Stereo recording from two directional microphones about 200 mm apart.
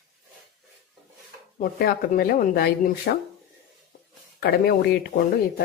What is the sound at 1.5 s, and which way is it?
Speech, 50° left (ahead or behind).